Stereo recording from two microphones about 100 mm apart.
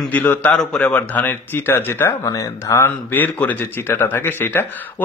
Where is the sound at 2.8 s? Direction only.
20° left (ahead or behind).